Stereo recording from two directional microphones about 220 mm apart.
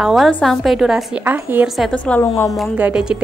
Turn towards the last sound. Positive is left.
turn(degrees=-5)  # may be behind; listen again after turning